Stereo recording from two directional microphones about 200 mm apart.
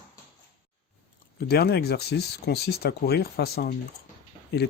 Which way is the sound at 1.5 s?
50° left (ahead or behind).